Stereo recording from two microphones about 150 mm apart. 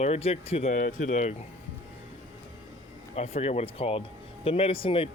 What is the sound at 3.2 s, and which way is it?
Speech, 45° left (ahead or behind).